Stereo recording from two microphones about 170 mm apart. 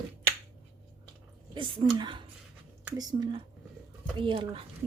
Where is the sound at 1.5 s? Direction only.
30° right (ahead or behind).